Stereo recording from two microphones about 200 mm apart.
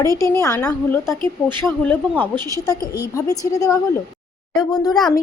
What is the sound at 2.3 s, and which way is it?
Speech, 20° right (ahead or behind).